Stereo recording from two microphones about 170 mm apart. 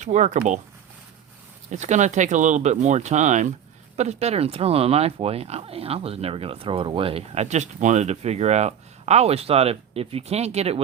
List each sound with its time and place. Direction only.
0.0 s speech: 45° right (ahead or behind)
1.7 s speech: 45° right (ahead or behind)